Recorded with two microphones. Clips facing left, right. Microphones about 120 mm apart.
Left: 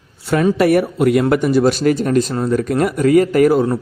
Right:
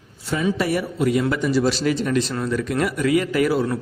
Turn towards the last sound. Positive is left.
turn(degrees=50)  # may be behind; listen again after turning